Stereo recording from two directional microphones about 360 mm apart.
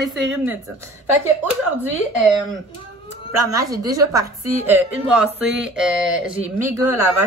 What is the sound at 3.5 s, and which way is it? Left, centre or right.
A woman's voice, centre.